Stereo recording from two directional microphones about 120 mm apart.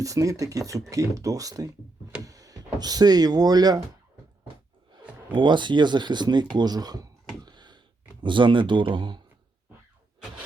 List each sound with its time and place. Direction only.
0.0 s speech: 25° right (ahead or behind)
2.2 s a sound: 30° right (ahead or behind)
2.7 s speech: 35° right (ahead or behind)
5.3 s speech: 40° right (ahead or behind)
7.4 s a sound: 40° right (ahead or behind)
8.2 s speech: 45° right (ahead or behind)